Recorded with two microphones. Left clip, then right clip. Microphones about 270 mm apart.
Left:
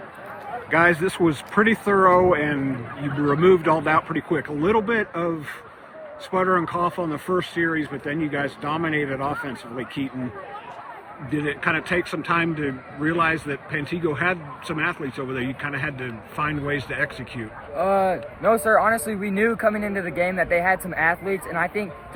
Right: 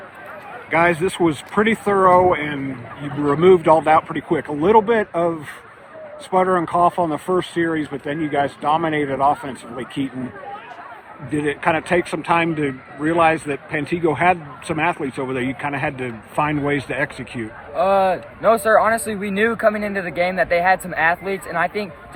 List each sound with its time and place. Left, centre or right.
0.7 s speech: centre
11.3 s speech: centre
17.7 s speech: right